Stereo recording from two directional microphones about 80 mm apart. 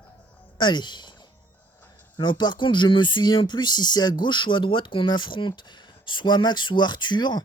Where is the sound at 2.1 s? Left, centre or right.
Left.